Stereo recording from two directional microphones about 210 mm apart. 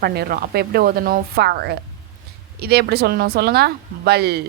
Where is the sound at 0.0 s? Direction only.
50° right (ahead or behind).